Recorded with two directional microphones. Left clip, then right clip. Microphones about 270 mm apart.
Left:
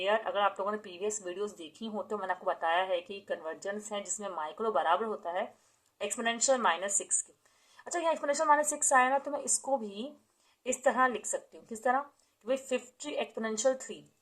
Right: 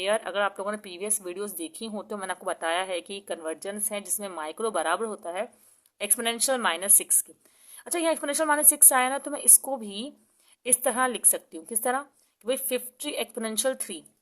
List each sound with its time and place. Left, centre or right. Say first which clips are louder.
0.0 s speech: right 3 dB; right